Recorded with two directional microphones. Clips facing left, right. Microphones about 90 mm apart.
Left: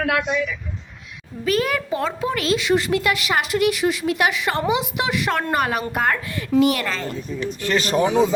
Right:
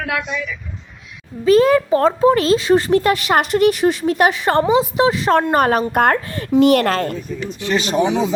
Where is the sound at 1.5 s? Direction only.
30° right (ahead or behind).